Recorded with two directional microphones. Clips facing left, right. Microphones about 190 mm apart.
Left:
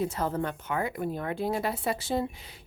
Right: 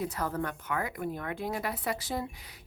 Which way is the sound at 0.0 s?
25° left (ahead or behind).